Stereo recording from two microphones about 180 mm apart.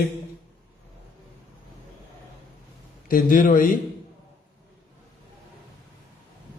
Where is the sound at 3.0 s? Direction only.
50° left (ahead or behind).